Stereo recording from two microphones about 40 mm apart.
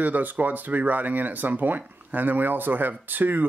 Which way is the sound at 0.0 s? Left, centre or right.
Right.